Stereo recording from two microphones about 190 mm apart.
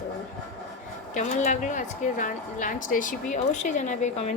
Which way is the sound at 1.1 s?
40° left (ahead or behind).